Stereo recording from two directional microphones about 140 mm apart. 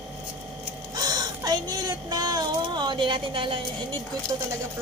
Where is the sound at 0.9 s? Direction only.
30° right (ahead or behind).